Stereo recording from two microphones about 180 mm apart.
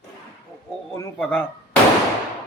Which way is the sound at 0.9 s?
10° left (ahead or behind).